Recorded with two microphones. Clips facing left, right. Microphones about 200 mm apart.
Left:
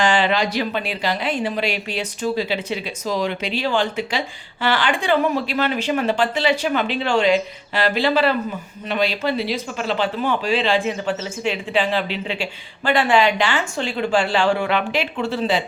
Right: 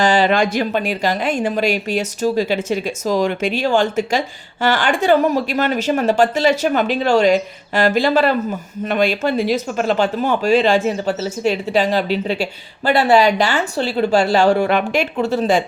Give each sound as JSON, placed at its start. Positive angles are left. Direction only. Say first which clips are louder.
{"t": 0.0, "sound": "speech", "louder": "right 4 dB", "side_deg": -40}